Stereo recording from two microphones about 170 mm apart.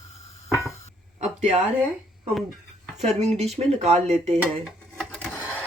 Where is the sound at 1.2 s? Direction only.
40° right (ahead or behind).